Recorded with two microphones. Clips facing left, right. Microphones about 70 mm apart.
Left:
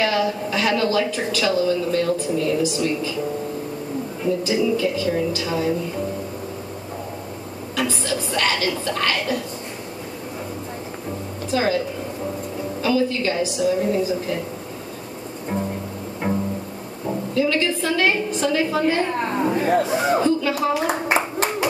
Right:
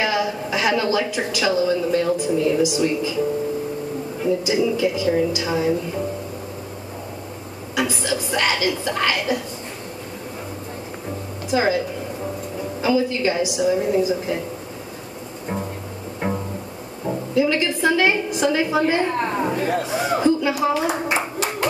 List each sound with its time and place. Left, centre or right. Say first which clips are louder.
0.0 s a woman's voice: left 1 dB; centre
4.4 s a woman's voice: left 2 dB; centre
7.7 s a woman's voice: right 1 dB; centre
11.5 s a woman's voice: right 1 dB; centre
12.8 s a woman's voice: right 1 dB; centre
16.2 s pizzicato: left 1 dB; centre
17.3 s a woman's voice: right 1 dB; centre
19.5 s speech: left 3 dB; left
20.2 s a woman's voice: right 1 dB; centre